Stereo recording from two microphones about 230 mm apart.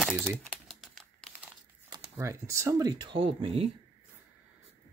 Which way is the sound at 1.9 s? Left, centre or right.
Centre.